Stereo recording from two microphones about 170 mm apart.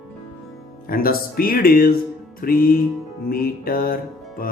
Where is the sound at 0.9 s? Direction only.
60° left (ahead or behind).